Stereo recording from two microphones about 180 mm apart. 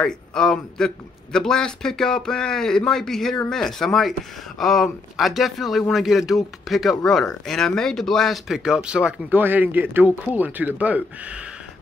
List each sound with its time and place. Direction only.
0.0 s speech: 5° left (ahead or behind)